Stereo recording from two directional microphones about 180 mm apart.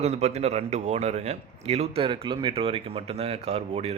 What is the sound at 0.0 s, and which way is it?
Speech, 35° right (ahead or behind).